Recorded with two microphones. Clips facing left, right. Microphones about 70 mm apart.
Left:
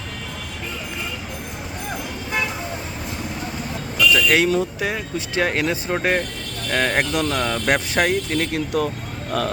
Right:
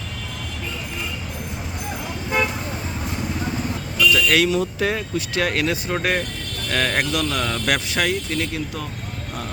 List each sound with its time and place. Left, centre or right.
4.1 s vehicle: left
4.6 s speech: centre
5.1 s speech: left
7.1 s speech: left
7.3 s speech: centre
7.7 s speech: left
8.5 s speech: left